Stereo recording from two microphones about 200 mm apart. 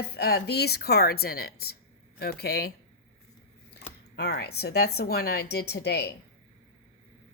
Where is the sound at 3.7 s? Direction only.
55° left (ahead or behind).